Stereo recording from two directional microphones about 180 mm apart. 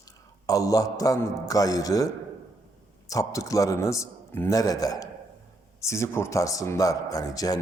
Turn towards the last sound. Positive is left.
turn(degrees=20)  # may be behind; listen again after turning